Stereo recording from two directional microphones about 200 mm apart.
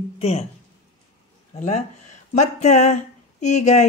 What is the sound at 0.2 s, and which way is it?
Speech, 30° left (ahead or behind).